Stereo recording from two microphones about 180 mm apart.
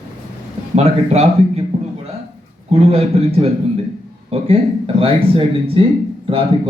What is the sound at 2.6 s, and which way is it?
Speech, 35° right (ahead or behind).